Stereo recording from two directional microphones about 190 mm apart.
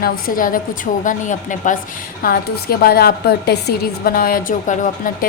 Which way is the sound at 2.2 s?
50° left (ahead or behind).